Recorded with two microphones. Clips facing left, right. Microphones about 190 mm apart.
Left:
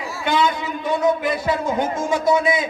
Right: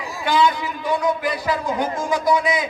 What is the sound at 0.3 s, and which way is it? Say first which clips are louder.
A man's voice: right 1 dB; 25° left (ahead or behind).